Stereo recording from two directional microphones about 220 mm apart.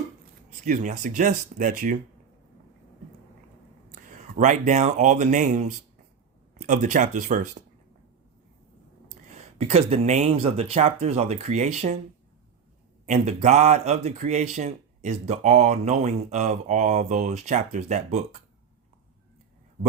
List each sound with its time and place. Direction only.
0.5 s speech: 35° right (ahead or behind)
3.9 s speech: 35° right (ahead or behind)
6.5 s a sound: 35° right (ahead or behind)
6.9 s speech: 35° right (ahead or behind)
9.3 s speech: 25° right (ahead or behind)
13.1 s speech: 30° right (ahead or behind)